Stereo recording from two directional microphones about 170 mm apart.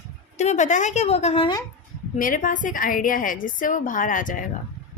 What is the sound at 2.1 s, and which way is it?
A woman's voice, 55° left (ahead or behind).